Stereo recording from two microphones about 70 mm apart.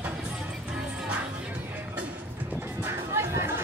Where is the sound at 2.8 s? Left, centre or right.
Right.